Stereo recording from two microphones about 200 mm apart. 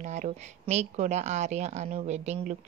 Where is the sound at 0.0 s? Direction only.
35° right (ahead or behind).